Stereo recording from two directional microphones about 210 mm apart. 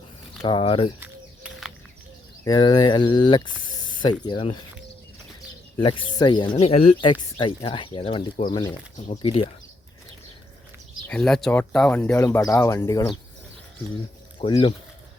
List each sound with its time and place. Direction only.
0.4 s speech: 25° left (ahead or behind)
2.4 s speech: 20° left (ahead or behind)
5.8 s speech: 25° left (ahead or behind)
11.1 s speech: 5° left (ahead or behind)
14.3 s speech: 25° left (ahead or behind)